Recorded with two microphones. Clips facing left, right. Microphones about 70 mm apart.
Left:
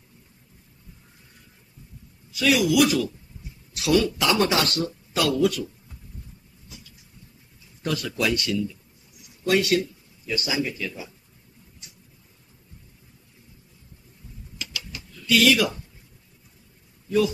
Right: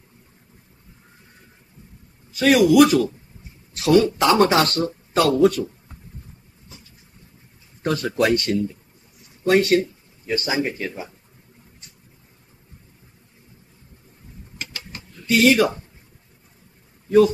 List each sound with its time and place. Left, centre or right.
2.3 s speech: right
6.7 s vehicle: right
7.8 s speech: right
14.6 s mechanisms: right